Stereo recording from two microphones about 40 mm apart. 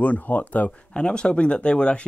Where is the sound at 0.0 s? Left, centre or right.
Left.